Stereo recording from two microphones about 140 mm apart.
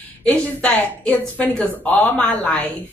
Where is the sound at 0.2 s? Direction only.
10° left (ahead or behind).